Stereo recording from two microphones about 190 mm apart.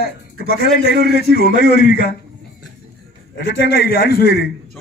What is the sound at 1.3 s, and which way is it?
Speech, 60° right (ahead or behind).